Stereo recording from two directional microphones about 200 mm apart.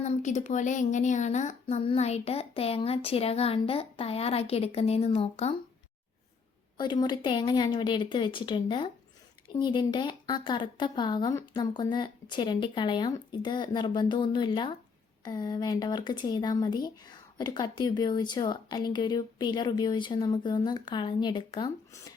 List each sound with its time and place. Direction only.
0.0 s speech: 35° left (ahead or behind)
6.7 s speech: 20° left (ahead or behind)